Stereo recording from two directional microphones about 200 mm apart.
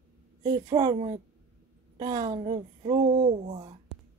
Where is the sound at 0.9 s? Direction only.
30° right (ahead or behind).